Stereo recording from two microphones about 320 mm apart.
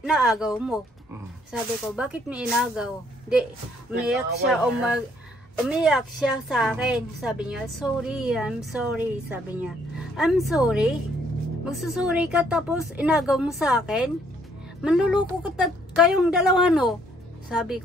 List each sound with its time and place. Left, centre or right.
0.0 s a woman's voice: centre
1.5 s a woman's voice: centre